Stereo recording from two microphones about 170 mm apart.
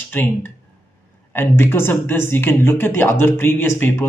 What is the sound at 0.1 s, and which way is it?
Speech, 10° left (ahead or behind).